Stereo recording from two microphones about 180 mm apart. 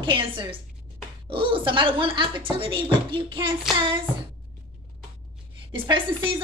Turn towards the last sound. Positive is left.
turn(degrees=-30)  # may be behind; listen again after turning